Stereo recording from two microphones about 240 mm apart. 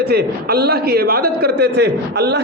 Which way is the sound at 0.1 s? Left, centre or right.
Right.